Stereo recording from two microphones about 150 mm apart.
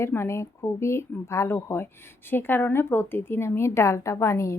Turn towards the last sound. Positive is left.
turn(degrees=20)  # may be behind; listen again after turning